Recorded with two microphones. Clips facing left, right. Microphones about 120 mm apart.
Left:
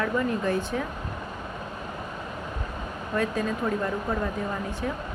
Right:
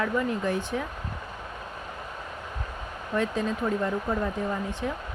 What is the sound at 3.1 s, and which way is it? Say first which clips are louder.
Speech: even; 20° right (ahead or behind).